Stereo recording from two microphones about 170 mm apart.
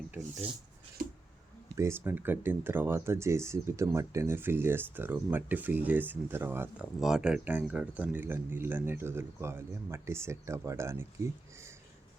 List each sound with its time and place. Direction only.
1.7 s speech: 15° right (ahead or behind)